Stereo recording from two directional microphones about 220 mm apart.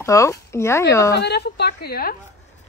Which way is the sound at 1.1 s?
50° left (ahead or behind).